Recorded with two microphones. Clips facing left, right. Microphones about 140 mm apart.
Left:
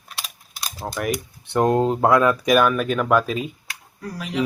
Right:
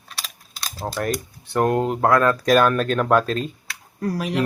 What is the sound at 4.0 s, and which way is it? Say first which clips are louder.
Speech: right 3 dB; 65° right (ahead or behind).